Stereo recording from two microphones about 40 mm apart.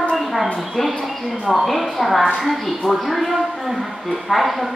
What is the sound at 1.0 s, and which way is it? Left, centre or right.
Speech, centre.